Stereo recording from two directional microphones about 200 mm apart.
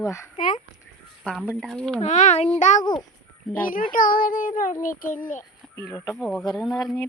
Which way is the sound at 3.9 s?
45° left (ahead or behind).